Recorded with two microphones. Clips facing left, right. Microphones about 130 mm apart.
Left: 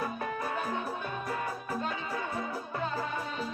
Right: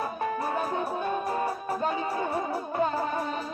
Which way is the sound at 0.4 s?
40° right (ahead or behind).